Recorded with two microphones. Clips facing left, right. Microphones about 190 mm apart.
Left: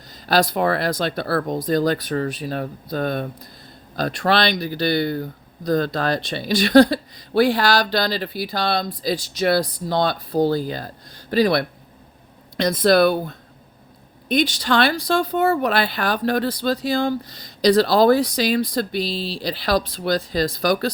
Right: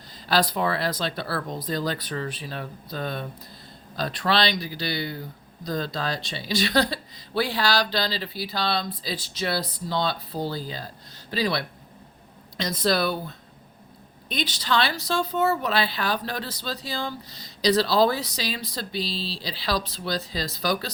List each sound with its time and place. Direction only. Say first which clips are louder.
0.3 s speech: left 5 dB; 45° left (ahead or behind)